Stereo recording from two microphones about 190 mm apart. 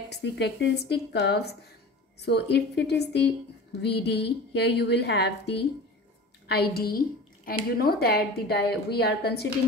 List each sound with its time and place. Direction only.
0.1 s a woman's voice: 65° left (ahead or behind)
6.5 s a woman's voice: 55° left (ahead or behind)